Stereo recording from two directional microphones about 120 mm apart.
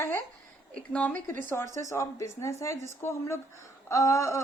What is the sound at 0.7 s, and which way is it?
Speech, 10° left (ahead or behind).